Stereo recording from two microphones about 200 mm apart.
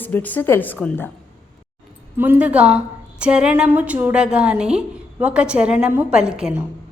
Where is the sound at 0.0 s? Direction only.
10° left (ahead or behind).